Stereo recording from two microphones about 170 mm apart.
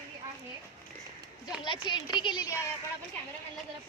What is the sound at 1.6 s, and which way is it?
Speech, 25° left (ahead or behind).